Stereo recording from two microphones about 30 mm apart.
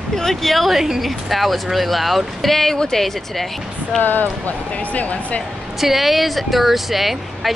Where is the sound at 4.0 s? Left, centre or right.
Left.